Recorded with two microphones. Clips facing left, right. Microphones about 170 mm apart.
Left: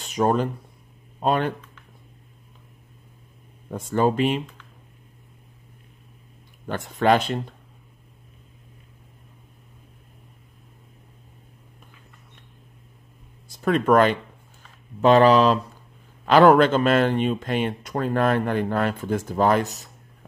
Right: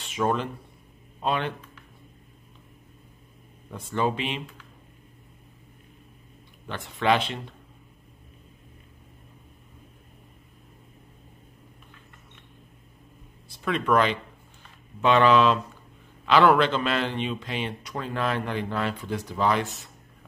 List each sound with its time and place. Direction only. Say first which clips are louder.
0.0 s speech: left 5 dB; 40° left (ahead or behind)
3.9 s speech: left 6 dB; 45° left (ahead or behind)
6.7 s speech: left 4 dB; 40° left (ahead or behind)
13.5 s speech: left 5 dB; 45° left (ahead or behind)